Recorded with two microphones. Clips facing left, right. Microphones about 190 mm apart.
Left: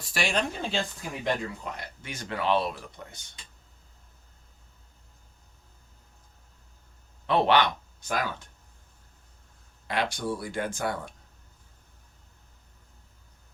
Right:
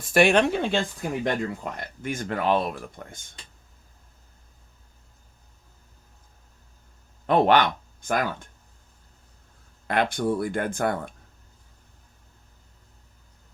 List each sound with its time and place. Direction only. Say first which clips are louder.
0.0 s speech: right 10 dB; 55° right (ahead or behind)
7.3 s speech: right 3 dB; 50° right (ahead or behind)
9.8 s speech: right 5 dB; 55° right (ahead or behind)